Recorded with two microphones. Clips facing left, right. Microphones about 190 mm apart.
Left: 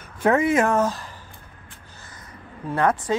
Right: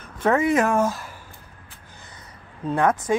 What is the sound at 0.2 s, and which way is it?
Speech, 5° left (ahead or behind).